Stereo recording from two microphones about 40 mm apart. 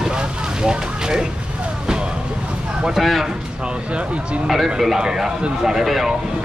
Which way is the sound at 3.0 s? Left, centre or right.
Centre.